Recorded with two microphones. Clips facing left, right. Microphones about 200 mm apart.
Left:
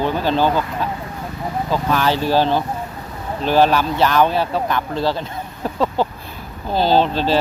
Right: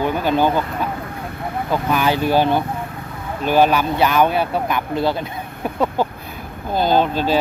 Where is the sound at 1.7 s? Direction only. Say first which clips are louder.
Even; 15° right (ahead or behind).